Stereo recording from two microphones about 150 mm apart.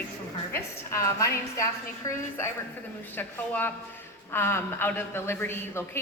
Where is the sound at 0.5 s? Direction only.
20° left (ahead or behind).